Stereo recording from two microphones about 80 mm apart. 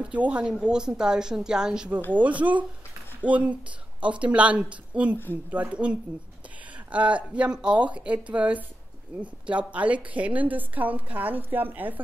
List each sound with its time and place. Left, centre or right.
0.0 s a woman's voice: centre